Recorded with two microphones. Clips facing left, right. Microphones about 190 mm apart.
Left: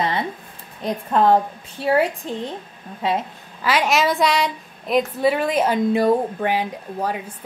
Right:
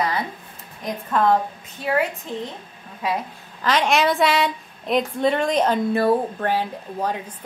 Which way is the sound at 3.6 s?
10° left (ahead or behind).